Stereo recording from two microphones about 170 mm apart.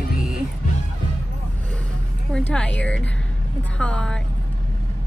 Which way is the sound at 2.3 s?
5° left (ahead or behind).